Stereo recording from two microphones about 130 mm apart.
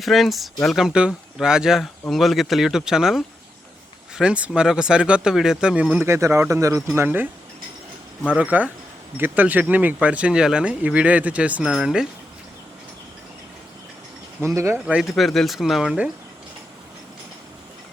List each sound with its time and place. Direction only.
0.0 s speech: centre (ahead or behind)
6.1 s speech: 25° right (ahead or behind)
8.3 s speech: 10° right (ahead or behind)
14.4 s speech: 20° right (ahead or behind)
15.1 s speech: centre (ahead or behind)